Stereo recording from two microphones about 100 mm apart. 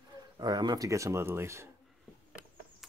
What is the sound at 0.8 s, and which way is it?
Speech, 30° right (ahead or behind).